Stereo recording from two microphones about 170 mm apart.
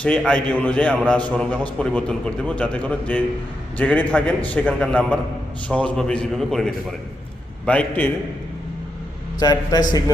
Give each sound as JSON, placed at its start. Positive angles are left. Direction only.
{"t": 0.0, "sound": "a man's voice", "side_deg": 5}
{"t": 9.4, "sound": "a man's voice", "side_deg": 25}